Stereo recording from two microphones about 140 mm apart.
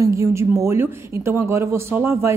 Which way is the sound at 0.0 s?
20° right (ahead or behind).